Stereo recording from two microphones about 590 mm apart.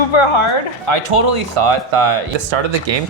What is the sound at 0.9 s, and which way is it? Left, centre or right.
Speech, right.